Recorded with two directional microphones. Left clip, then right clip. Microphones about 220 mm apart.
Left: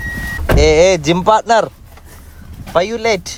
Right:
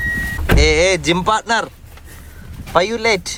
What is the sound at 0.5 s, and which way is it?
Speech, 20° left (ahead or behind).